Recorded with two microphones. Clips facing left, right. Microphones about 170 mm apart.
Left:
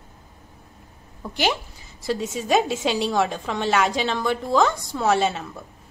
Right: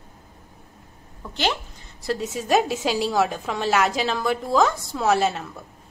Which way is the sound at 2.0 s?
Centre (ahead or behind).